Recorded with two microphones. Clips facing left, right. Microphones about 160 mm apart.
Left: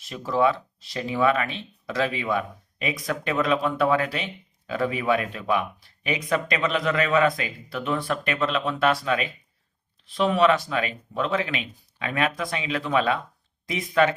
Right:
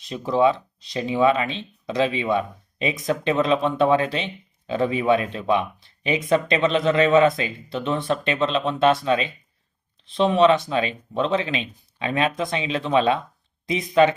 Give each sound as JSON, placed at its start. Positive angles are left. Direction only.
{"t": 0.0, "sound": "speech", "side_deg": -20}